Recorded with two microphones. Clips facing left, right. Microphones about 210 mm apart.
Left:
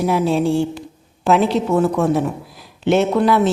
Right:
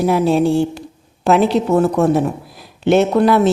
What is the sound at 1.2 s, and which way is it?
A woman's voice, 40° right (ahead or behind).